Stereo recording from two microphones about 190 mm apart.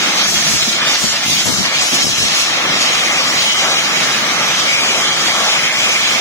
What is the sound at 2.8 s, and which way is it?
Vehicle, 15° left (ahead or behind).